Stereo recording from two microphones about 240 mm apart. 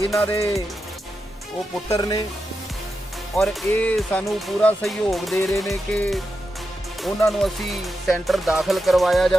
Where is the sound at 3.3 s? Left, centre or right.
Centre.